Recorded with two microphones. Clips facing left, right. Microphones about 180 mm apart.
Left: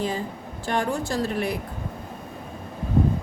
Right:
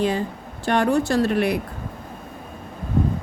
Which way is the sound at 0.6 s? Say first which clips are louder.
Right 6 dB; 70° right (ahead or behind).